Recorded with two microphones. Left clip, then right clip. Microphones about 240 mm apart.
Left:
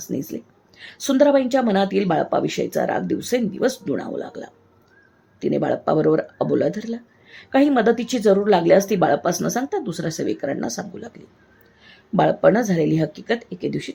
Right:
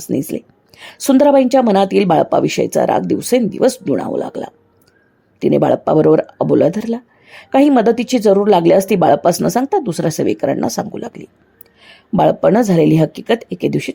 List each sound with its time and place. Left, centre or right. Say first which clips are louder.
0.0 s speech: right 8 dB; right